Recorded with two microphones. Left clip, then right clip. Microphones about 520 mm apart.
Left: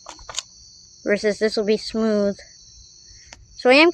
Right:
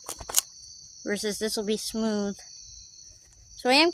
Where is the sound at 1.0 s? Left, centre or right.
Right.